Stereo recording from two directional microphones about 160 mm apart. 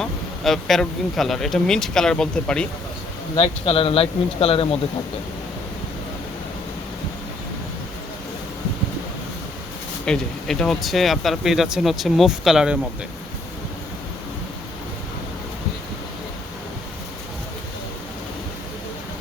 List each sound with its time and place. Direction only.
0.0 s speech: centre (ahead or behind)
3.3 s speech: 35° left (ahead or behind)
10.1 s speech: 5° left (ahead or behind)